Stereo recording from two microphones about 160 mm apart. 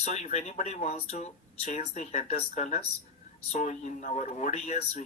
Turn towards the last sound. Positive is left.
turn(degrees=45)  # may be behind; listen again after turning